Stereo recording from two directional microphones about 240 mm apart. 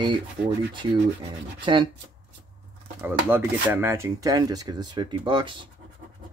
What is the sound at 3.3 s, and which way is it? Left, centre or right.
Speech, centre.